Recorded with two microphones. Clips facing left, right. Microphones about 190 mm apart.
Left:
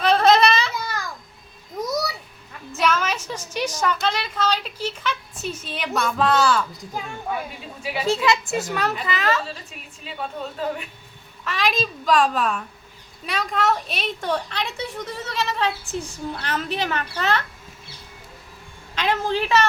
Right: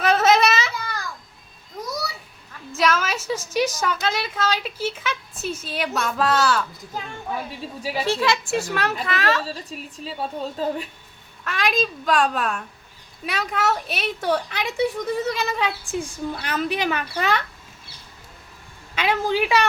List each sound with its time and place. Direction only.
0.0 s a sound: 5° right (ahead or behind)
2.8 s a sound: 5° right (ahead or behind)
3.2 s speech: 5° right (ahead or behind)
8.0 s speech: centre (ahead or behind)
9.5 s a woman's voice: 35° right (ahead or behind)
11.4 s a woman's voice: centre (ahead or behind)
18.9 s a woman's voice: 10° right (ahead or behind)